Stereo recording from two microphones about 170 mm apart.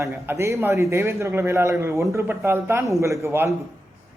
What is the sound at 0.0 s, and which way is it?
Speech, 15° right (ahead or behind).